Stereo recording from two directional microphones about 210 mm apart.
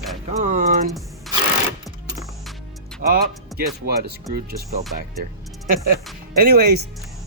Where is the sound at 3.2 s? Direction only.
50° right (ahead or behind).